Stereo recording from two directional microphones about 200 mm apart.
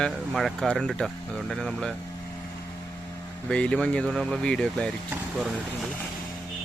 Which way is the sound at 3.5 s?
5° left (ahead or behind).